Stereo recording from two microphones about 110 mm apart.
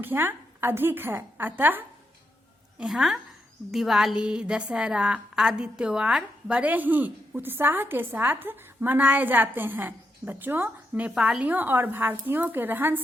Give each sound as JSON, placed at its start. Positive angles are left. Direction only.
{"t": 0.0, "sound": "a woman's voice", "side_deg": -20}
{"t": 2.7, "sound": "a woman's voice", "side_deg": -5}